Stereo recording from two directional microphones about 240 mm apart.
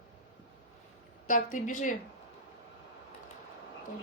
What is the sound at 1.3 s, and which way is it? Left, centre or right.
Speech, left.